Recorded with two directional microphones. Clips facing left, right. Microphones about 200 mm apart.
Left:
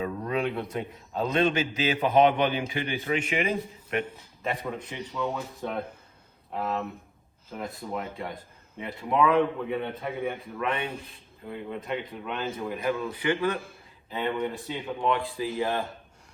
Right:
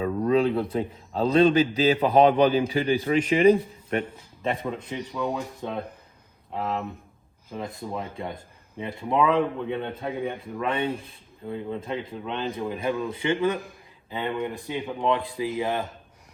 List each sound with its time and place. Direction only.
0.0 s a man's voice: 30° right (ahead or behind)
4.4 s a man's voice: 20° right (ahead or behind)
7.6 s a man's voice: 15° right (ahead or behind)
10.6 s a man's voice: 30° right (ahead or behind)